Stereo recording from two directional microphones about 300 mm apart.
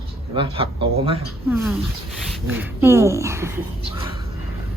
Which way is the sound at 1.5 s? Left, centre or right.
Centre.